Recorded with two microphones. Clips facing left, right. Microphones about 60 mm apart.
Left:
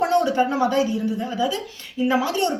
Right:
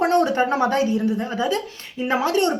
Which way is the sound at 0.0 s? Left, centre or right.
Right.